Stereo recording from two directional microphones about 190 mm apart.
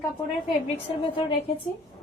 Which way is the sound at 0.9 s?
25° left (ahead or behind).